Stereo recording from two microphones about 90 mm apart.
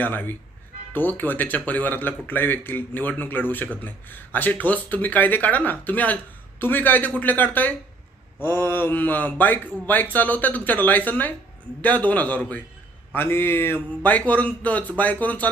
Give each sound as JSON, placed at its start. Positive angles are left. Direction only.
{"t": 0.0, "sound": "a man's voice", "side_deg": 20}
{"t": 13.1, "sound": "speech", "side_deg": 25}